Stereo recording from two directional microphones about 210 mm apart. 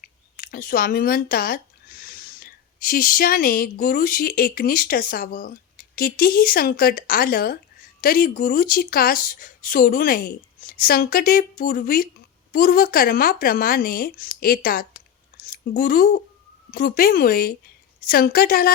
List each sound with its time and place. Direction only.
0.0 s a woman's voice: 45° left (ahead or behind)